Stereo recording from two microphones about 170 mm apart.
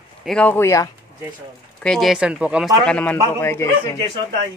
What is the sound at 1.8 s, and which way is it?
Speech, centre (ahead or behind).